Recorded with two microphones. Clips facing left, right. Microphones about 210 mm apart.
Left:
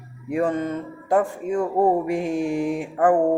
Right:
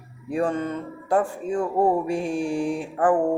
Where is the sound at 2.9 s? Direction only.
40° left (ahead or behind).